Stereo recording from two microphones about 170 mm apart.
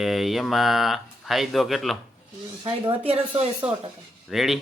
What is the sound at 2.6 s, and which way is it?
Speech, 35° right (ahead or behind).